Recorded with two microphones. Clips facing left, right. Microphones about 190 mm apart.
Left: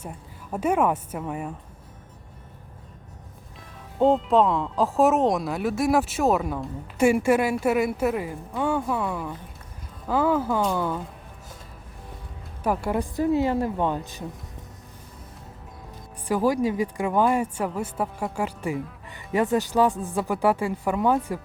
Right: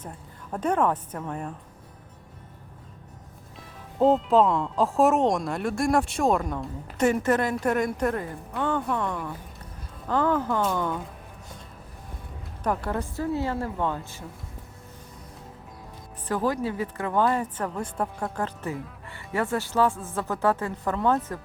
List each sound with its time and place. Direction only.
0.5 s speech: 10° left (ahead or behind)
3.9 s speech: centre (ahead or behind)
12.6 s speech: 10° left (ahead or behind)
16.3 s speech: 10° left (ahead or behind)